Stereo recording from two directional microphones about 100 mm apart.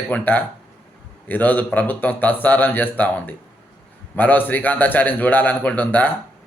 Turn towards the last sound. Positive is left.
turn(degrees=15)  # may be behind; listen again after turning